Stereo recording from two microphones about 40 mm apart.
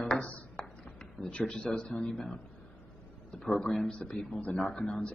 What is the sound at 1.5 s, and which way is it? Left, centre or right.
Speech, left.